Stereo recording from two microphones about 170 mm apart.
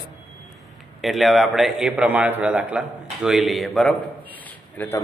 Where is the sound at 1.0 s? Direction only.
Centre (ahead or behind).